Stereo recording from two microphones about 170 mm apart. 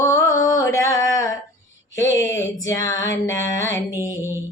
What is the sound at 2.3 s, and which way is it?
Mantra, 15° left (ahead or behind).